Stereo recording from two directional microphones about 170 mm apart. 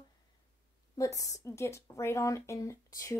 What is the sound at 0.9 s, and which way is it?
A woman's voice, 20° left (ahead or behind).